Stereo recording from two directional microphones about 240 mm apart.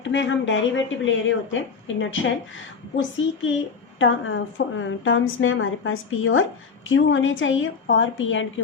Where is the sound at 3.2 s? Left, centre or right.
Left.